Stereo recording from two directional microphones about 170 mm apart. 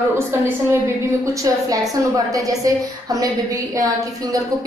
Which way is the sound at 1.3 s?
20° right (ahead or behind).